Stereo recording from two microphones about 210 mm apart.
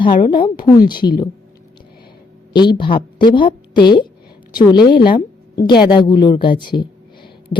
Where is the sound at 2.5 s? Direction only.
20° left (ahead or behind).